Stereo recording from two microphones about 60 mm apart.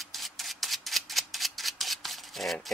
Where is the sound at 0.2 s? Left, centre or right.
Centre.